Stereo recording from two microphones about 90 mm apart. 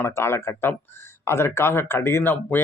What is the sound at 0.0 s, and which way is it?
Speech, 25° left (ahead or behind).